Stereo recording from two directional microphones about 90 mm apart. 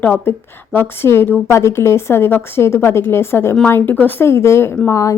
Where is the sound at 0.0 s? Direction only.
20° left (ahead or behind).